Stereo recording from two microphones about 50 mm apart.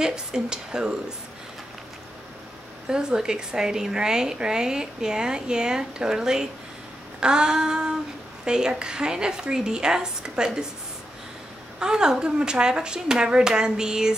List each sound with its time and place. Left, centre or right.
0.0 s a woman's voice: centre
2.9 s a woman's voice: centre
11.8 s a woman's voice: centre